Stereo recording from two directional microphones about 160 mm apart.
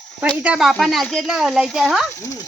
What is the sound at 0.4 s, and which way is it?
Speech, 5° right (ahead or behind).